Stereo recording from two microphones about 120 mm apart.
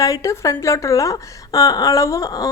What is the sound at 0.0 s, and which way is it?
Speech, 25° left (ahead or behind).